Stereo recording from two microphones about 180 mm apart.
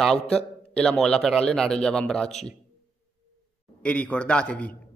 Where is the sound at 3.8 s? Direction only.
10° left (ahead or behind).